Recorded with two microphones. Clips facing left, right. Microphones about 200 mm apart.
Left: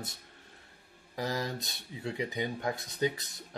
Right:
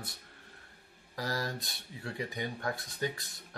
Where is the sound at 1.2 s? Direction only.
20° left (ahead or behind).